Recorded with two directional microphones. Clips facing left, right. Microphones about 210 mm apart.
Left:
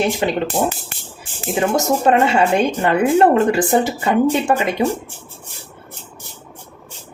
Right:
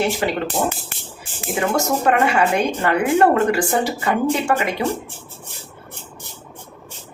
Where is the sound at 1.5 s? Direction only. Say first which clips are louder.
Left 2 dB; 20° left (ahead or behind).